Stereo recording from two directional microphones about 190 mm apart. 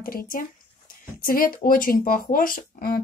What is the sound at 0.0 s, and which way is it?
Speech, 50° left (ahead or behind).